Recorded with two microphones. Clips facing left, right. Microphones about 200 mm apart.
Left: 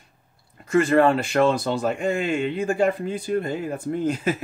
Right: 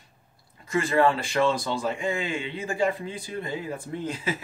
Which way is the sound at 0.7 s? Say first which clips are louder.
Left 5 dB; 60° left (ahead or behind).